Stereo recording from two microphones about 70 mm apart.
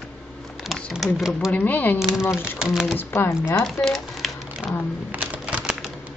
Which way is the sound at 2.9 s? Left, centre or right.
Left.